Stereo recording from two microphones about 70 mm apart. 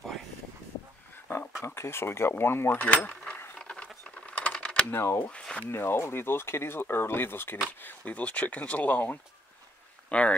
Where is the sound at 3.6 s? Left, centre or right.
Centre.